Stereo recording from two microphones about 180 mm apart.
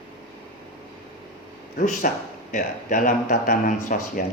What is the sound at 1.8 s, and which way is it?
Speech, 40° left (ahead or behind).